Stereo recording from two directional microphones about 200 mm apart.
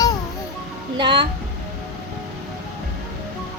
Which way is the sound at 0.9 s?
25° right (ahead or behind).